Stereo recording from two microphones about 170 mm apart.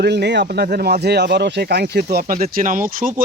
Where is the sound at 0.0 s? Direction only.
80° right.